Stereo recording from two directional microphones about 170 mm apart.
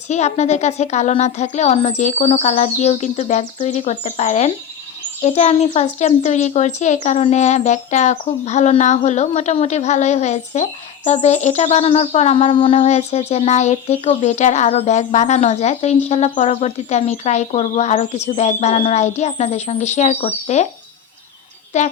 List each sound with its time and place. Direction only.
0.1 s a child's voice: 40° left (ahead or behind)
21.7 s a child's voice: 40° left (ahead or behind)